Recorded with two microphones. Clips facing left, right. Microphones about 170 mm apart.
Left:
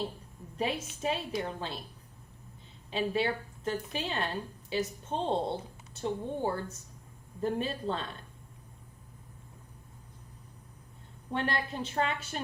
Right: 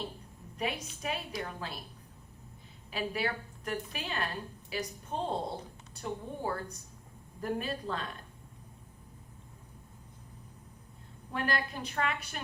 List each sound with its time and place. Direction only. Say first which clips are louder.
0.5 s a woman's voice: left 3 dB; 30° left (ahead or behind)
2.9 s a woman's voice: left 4 dB; 25° left (ahead or behind)
11.3 s a woman's voice: left 1 dB; 30° left (ahead or behind)